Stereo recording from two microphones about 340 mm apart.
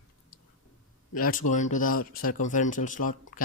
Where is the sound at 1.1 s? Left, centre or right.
Left.